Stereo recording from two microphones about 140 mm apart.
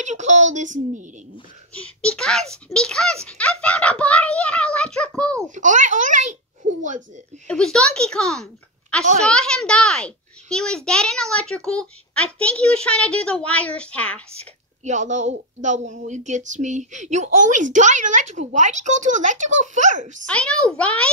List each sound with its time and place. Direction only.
0.0 s a woman's voice: 60° right (ahead or behind)
1.7 s a child's voice: 10° left (ahead or behind)
5.5 s a woman's voice: 65° right (ahead or behind)
7.4 s a child's voice: 5° left (ahead or behind)
14.9 s a woman's voice: 60° right (ahead or behind)
20.2 s a child's voice: 10° left (ahead or behind)